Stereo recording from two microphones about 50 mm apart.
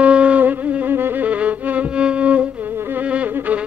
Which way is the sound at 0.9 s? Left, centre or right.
Right.